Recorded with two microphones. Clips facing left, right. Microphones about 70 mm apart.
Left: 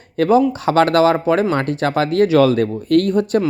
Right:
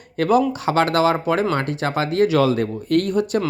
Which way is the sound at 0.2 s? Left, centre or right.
Left.